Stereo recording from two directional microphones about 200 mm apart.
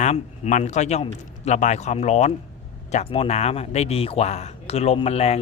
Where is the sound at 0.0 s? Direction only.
35° left (ahead or behind).